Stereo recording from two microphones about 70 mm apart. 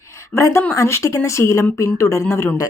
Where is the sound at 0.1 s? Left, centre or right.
Left.